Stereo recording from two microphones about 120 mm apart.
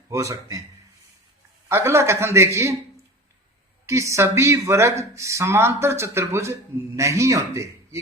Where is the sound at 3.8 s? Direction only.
25° right (ahead or behind).